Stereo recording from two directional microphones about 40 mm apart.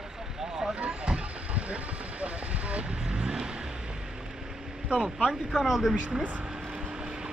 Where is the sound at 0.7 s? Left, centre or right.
Right.